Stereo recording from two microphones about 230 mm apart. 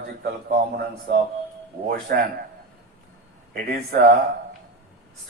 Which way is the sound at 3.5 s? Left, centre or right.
Right.